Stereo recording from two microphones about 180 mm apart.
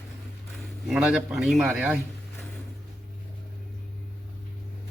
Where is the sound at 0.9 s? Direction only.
5° right (ahead or behind).